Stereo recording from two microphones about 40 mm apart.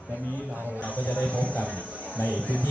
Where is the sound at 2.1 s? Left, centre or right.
Left.